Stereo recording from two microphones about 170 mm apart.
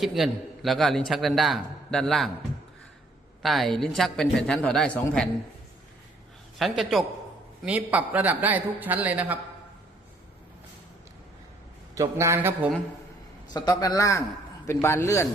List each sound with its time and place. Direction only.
0.0 s a man's voice: centre (ahead or behind)
3.4 s a man's voice: centre (ahead or behind)
6.6 s a man's voice: centre (ahead or behind)
11.9 s a man's voice: 15° right (ahead or behind)
13.5 s a man's voice: 25° left (ahead or behind)